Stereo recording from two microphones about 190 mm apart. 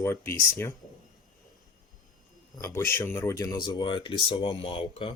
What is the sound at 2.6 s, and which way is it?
Speech, 15° left (ahead or behind).